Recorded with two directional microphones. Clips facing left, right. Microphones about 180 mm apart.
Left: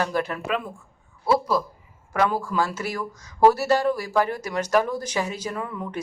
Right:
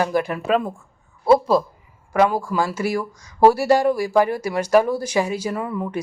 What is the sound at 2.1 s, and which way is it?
Speech, 15° right (ahead or behind).